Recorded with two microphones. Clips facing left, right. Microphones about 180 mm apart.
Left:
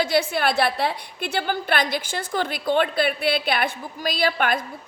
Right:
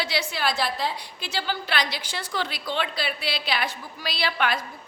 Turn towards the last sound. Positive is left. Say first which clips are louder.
# left 4 dB
turn(degrees=50)  # may be behind; listen again after turning